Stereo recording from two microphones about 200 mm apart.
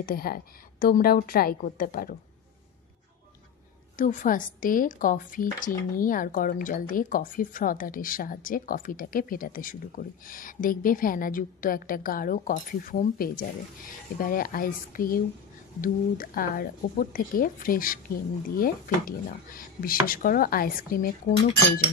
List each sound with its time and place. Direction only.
0.0 s speech: 50° left (ahead or behind)
4.0 s speech: 40° left (ahead or behind)